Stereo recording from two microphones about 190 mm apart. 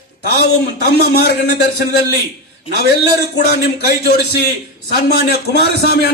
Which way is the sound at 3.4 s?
60° left (ahead or behind).